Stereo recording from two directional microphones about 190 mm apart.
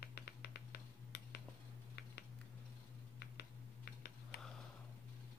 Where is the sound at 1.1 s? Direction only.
60° left (ahead or behind).